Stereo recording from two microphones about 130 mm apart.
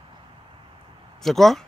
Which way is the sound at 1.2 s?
Centre (ahead or behind).